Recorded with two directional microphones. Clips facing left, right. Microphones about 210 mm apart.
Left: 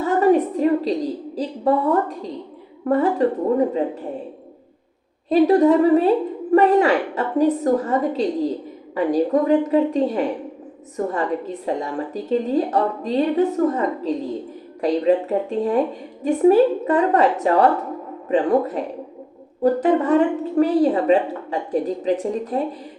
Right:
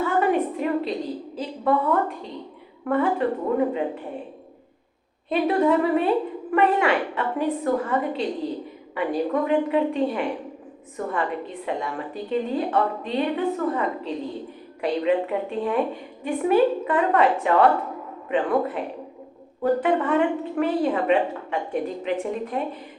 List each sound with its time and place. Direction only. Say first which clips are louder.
0.0 s a sound: left 5 dB; 40° left (ahead or behind)
2.8 s a woman's voice: left 4 dB; 40° left (ahead or behind)
5.3 s a woman's voice: left 6 dB; 40° left (ahead or behind)